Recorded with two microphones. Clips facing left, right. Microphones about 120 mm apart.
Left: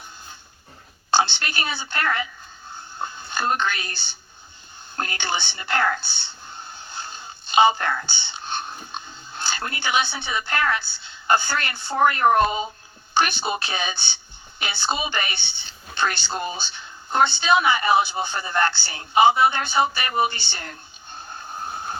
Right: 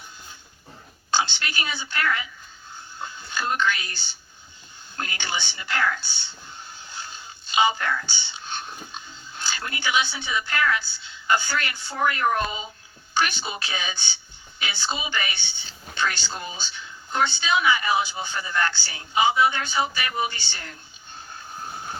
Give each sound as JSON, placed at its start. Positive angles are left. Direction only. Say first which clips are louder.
{"t": 1.1, "sound": "a woman's voice", "louder": "left 4 dB", "side_deg": 60}
{"t": 4.9, "sound": "a sound", "louder": "left 4 dB", "side_deg": 55}
{"t": 9.8, "sound": "a woman's voice", "louder": "left 1 dB", "side_deg": 55}